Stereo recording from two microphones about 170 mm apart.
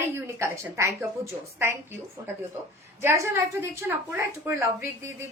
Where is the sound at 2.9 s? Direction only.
15° right (ahead or behind).